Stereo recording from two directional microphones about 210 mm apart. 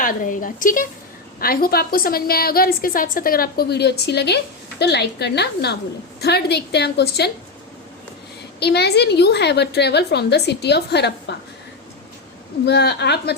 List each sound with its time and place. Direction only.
0.0 s a woman's voice: 40° left (ahead or behind)
8.5 s a woman's voice: 50° left (ahead or behind)
12.6 s a woman's voice: 50° left (ahead or behind)